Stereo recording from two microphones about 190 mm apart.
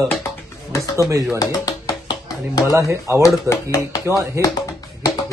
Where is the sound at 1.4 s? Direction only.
20° left (ahead or behind).